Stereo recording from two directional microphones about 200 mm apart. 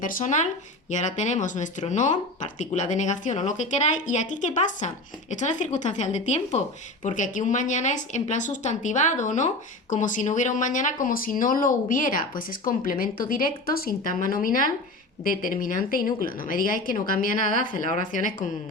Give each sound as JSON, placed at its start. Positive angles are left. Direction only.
{"t": 0.0, "sound": "speech", "side_deg": 40}